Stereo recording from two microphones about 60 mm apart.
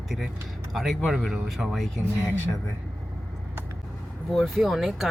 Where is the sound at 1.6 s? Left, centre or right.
Right.